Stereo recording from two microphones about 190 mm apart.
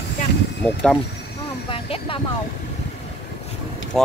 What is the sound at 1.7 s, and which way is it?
Vehicle, 30° left (ahead or behind).